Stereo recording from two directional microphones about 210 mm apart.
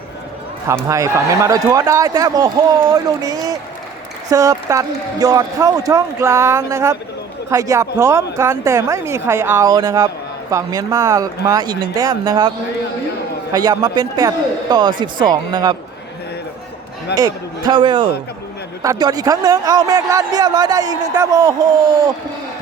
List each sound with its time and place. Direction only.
0.9 s a man's voice: 15° right (ahead or behind)
17.2 s a man's voice: 20° right (ahead or behind)